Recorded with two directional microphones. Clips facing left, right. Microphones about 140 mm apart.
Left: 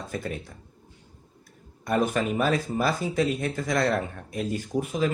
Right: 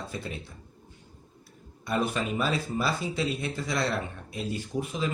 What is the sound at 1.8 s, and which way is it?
Speech, 50° left (ahead or behind).